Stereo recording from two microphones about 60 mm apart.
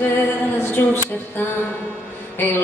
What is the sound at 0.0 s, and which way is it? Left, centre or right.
Music, left.